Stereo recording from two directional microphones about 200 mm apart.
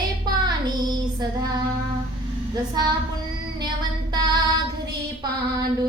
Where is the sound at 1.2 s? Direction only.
20° right (ahead or behind).